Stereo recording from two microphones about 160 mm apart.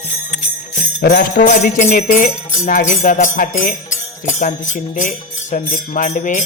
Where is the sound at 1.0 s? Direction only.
90° left.